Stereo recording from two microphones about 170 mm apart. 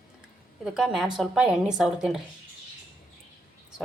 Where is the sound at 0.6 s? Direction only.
Centre (ahead or behind).